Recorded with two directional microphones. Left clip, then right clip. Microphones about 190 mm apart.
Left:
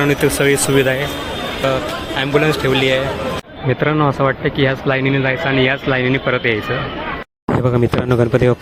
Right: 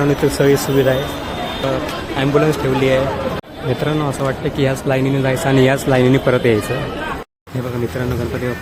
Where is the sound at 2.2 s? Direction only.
Centre (ahead or behind).